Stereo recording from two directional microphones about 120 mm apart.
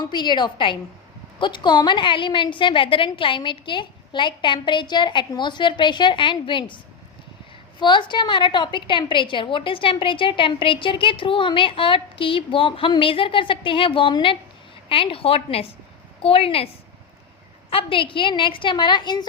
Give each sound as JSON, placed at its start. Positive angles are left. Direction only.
{"t": 0.0, "sound": "a woman's voice", "side_deg": 40}
{"t": 7.8, "sound": "a woman's voice", "side_deg": 40}
{"t": 17.7, "sound": "a woman's voice", "side_deg": 50}